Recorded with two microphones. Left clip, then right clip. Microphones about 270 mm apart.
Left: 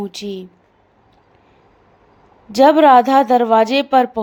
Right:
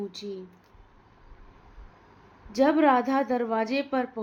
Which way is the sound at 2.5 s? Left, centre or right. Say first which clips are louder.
Left 12 dB; left.